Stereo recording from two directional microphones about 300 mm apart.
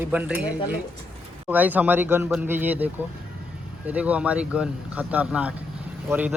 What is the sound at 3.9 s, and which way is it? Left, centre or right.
A man's voice, centre.